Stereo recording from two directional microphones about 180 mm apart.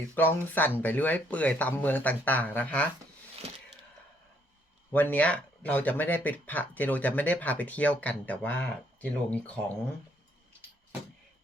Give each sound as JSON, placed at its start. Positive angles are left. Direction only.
{"t": 0.1, "sound": "speech", "side_deg": 10}
{"t": 4.9, "sound": "speech", "side_deg": 10}